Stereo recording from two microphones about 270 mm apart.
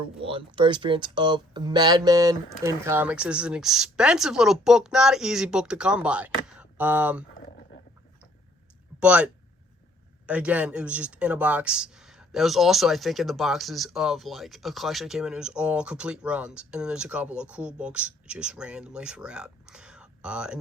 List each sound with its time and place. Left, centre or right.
0.2 s speech: centre
9.0 s speech: centre